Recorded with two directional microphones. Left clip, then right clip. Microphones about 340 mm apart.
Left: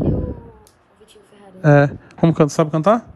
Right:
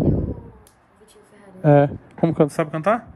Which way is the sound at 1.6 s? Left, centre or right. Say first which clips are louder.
Left 1 dB; centre.